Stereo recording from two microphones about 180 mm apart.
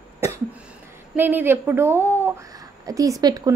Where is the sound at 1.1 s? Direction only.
10° right (ahead or behind).